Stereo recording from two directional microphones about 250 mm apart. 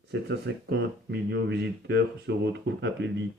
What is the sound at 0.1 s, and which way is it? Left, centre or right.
Speech, right.